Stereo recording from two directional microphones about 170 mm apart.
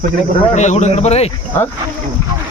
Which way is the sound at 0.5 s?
40° left (ahead or behind).